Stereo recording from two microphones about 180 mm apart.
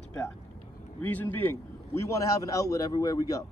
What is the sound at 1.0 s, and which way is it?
A man's voice, 10° left (ahead or behind).